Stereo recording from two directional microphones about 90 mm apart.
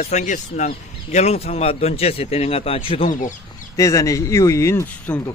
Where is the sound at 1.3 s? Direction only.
90° left.